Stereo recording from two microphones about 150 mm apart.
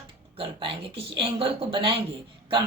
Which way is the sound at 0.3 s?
40° right (ahead or behind).